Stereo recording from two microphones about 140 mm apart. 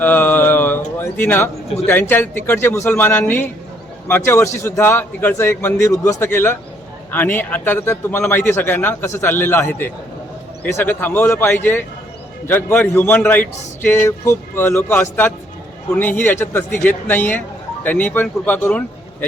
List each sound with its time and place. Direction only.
0.0 s mantra: 15° left (ahead or behind)
0.9 s a man's voice: 15° left (ahead or behind)